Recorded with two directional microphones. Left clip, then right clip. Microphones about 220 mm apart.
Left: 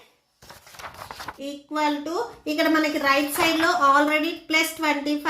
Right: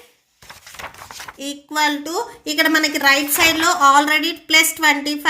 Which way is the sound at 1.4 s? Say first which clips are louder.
Right 6 dB; 50° right (ahead or behind).